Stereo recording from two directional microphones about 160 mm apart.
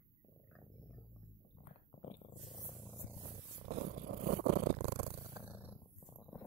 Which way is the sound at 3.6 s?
90° right.